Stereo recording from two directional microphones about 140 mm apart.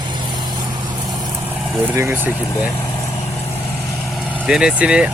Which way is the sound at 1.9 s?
20° right (ahead or behind).